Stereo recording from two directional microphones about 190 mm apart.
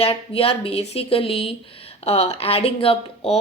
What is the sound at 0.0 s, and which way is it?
Speech, 30° left (ahead or behind).